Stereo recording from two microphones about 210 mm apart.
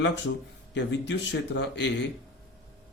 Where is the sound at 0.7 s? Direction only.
60° left (ahead or behind).